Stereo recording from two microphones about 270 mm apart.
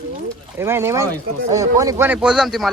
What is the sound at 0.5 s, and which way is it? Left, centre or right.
A man's voice, centre.